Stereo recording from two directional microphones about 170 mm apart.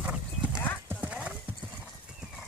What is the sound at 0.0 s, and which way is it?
Clip-clop, 5° right (ahead or behind).